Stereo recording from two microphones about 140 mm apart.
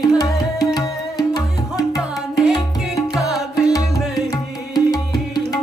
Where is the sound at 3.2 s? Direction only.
25° left (ahead or behind).